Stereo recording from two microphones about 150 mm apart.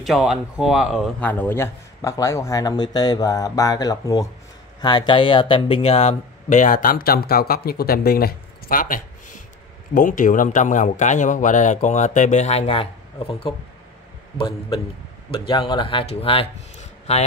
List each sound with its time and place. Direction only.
0.0 s speech: centre (ahead or behind)
1.2 s a man's voice: 15° left (ahead or behind); by 12.8 s 40° left (ahead or behind)
15.3 s speech: 35° left (ahead or behind)